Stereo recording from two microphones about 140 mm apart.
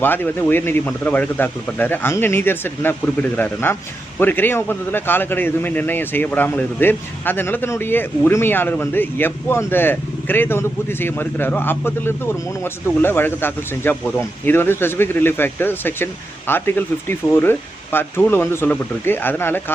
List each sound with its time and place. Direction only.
0.0 s a man's voice: 15° left (ahead or behind)